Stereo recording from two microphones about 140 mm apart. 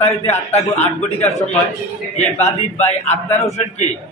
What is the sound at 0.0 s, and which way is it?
A man's voice, 50° left (ahead or behind).